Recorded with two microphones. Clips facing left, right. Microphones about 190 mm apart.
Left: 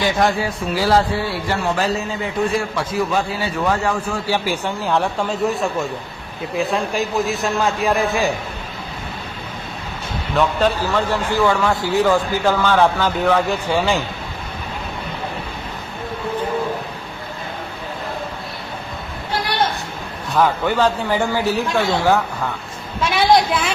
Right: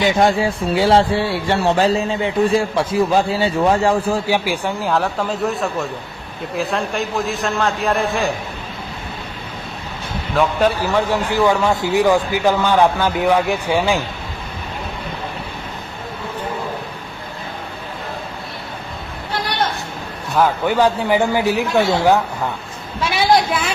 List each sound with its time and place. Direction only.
0.0 s speech: 25° right (ahead or behind)
4.3 s speech: 15° right (ahead or behind)
4.9 s a man's voice: centre (ahead or behind)
10.3 s speech: 10° right (ahead or behind)
20.3 s speech: 10° right (ahead or behind)
23.0 s a woman's voice: 5° right (ahead or behind)